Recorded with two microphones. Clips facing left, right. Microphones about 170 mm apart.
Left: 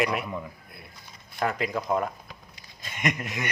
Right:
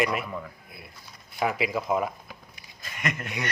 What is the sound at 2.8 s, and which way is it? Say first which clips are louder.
Speech: left 3 dB; 20° left (ahead or behind).